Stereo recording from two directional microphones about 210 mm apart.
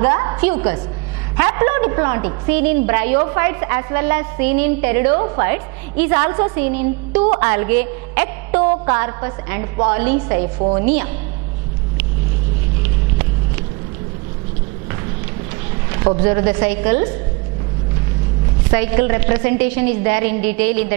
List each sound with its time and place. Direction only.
0.0 s a woman's voice: 20° right (ahead or behind)
5.1 s a woman's voice: 20° right (ahead or behind)
10.6 s a woman's voice: 30° right (ahead or behind)
12.8 s vehicle: 15° right (ahead or behind)
16.2 s a woman's voice: 15° right (ahead or behind)
18.7 s a woman's voice: 10° right (ahead or behind)